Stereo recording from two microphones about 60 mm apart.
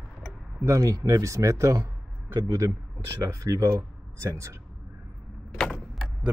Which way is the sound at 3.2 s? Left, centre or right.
Right.